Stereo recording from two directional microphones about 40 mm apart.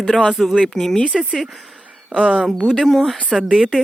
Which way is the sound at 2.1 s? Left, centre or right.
Right.